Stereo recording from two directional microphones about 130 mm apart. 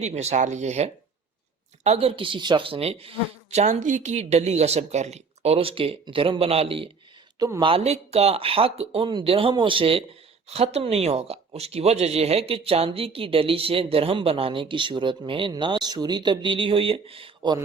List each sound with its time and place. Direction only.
0.0 s speech: 55° right (ahead or behind)
7.3 s speech: 25° right (ahead or behind)
7.6 s speech: 50° right (ahead or behind)